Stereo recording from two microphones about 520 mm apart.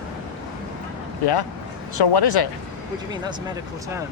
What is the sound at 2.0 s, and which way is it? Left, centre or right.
Speech, left.